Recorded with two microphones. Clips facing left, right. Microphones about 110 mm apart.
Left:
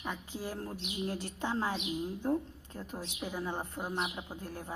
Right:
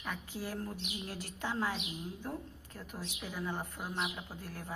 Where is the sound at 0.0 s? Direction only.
20° left (ahead or behind).